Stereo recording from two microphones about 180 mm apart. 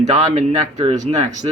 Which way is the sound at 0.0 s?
40° right (ahead or behind).